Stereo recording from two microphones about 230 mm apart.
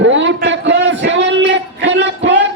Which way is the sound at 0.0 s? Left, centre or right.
Right.